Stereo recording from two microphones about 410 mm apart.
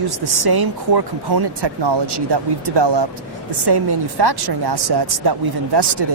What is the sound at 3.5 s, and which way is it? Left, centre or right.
Speech, right.